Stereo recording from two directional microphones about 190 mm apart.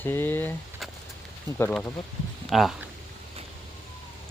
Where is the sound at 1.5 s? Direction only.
20° right (ahead or behind).